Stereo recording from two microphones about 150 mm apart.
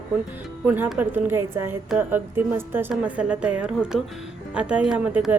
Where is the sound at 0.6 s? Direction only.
10° right (ahead or behind).